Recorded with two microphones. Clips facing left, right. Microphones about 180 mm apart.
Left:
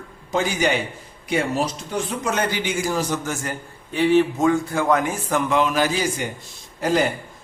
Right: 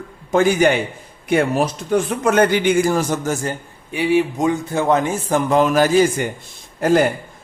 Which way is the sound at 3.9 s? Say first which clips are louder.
Even; 10° right (ahead or behind).